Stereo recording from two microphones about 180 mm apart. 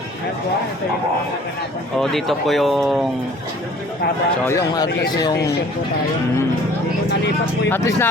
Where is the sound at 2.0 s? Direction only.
Centre (ahead or behind).